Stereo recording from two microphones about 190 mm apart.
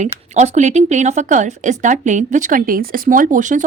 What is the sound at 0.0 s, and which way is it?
Speech, 40° right (ahead or behind).